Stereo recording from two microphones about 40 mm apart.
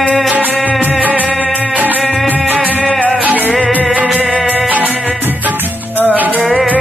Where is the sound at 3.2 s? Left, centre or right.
Right.